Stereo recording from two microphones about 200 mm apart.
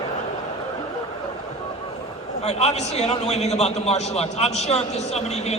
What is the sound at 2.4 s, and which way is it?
A man's voice, 35° left (ahead or behind).